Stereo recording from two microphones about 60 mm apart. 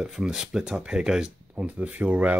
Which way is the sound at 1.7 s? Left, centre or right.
Right.